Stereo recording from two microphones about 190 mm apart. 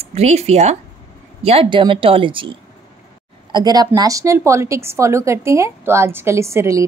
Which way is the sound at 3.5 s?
20° right (ahead or behind).